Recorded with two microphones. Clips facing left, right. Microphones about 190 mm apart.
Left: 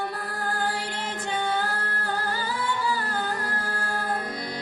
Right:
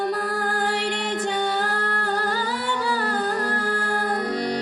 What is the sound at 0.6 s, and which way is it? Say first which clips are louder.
Music: right 5 dB; 75° right (ahead or behind).